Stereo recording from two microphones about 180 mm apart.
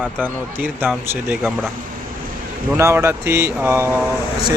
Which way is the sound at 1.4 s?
Centre (ahead or behind).